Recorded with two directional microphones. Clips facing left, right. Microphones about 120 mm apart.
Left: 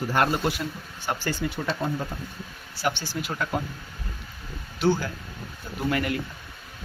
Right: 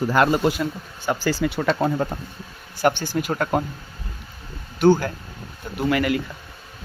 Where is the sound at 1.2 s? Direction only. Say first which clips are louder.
Right 9 dB; 90° right; by 2.1 s 70° right (ahead or behind).